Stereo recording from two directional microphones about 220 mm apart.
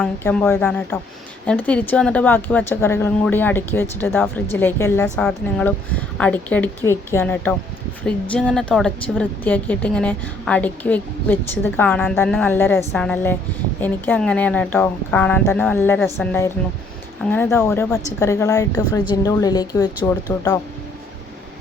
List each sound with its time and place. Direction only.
0.0 s a woman's voice: 5° left (ahead or behind)